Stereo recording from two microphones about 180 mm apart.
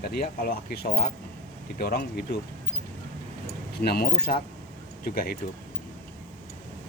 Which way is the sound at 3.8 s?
60° left (ahead or behind).